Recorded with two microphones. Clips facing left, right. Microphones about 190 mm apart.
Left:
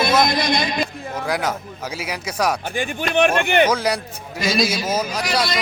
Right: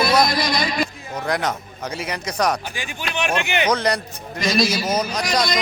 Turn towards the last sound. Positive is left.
turn(degrees=5)  # may be behind; listen again after turning